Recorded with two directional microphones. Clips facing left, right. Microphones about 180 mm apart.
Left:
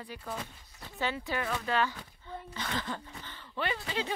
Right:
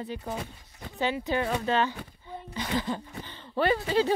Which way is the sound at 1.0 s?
15° right (ahead or behind).